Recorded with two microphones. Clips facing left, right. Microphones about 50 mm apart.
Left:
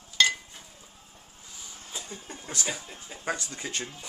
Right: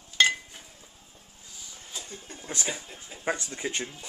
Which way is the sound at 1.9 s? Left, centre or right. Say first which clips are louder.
Left 2 dB; centre.